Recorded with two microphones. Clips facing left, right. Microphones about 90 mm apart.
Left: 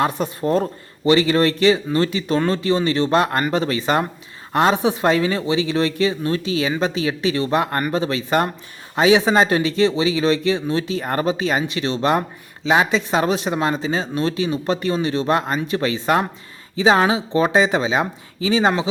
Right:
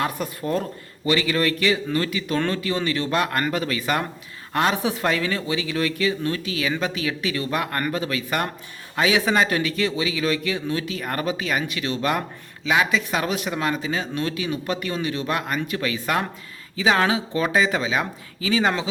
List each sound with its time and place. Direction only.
0.0 s speech: 25° left (ahead or behind)